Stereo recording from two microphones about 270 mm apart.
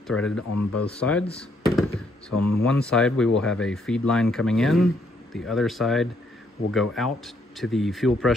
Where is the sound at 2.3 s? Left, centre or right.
Left.